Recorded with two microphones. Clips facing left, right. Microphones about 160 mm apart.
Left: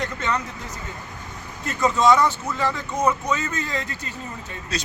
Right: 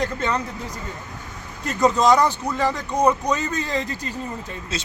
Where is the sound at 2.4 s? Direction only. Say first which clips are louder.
Right 2 dB; 15° right (ahead or behind).